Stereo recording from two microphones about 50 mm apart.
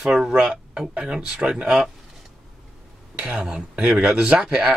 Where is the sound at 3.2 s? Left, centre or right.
Centre.